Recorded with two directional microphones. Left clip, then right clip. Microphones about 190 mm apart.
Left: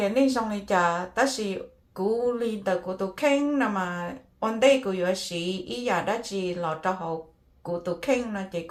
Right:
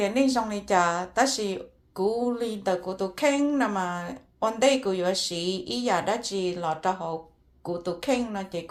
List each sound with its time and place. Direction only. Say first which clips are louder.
0.0 s speech: left 1 dB; 30° right (ahead or behind)